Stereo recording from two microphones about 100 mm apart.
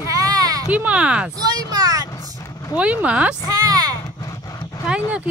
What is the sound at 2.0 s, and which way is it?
Vehicle, 35° left (ahead or behind).